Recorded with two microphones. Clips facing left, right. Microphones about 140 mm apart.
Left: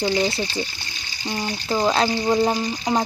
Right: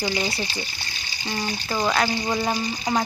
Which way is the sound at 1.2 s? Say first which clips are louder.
Left 2 dB; 15° left (ahead or behind).